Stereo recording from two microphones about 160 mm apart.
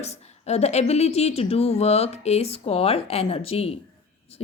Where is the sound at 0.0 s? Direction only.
45° left (ahead or behind).